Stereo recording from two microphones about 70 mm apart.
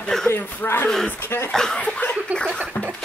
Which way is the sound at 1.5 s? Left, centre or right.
Centre.